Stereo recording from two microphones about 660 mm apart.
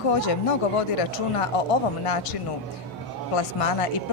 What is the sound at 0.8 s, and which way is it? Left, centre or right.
Speech, left.